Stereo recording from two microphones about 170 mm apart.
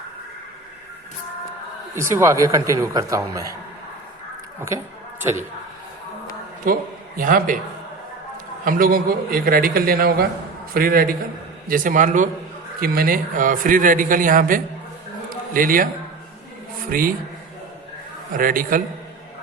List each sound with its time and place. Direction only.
2.0 s speech: 15° right (ahead or behind)
6.6 s a man's voice: 55° right (ahead or behind)
8.6 s a man's voice: 55° right (ahead or behind)
12.8 s a man's voice: 60° right (ahead or behind)
16.9 s a man's voice: 55° right (ahead or behind)
18.3 s a man's voice: 55° right (ahead or behind)